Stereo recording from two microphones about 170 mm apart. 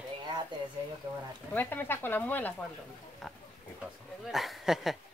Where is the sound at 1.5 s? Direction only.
10° left (ahead or behind).